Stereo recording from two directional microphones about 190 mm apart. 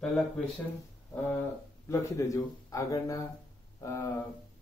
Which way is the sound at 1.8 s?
15° left (ahead or behind).